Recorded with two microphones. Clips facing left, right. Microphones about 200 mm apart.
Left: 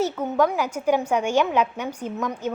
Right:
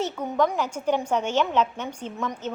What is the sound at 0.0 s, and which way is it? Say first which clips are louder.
A woman's voice: left 3 dB; 5° left (ahead or behind).